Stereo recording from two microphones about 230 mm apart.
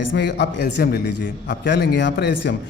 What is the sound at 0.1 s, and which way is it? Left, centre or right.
A man's voice, left.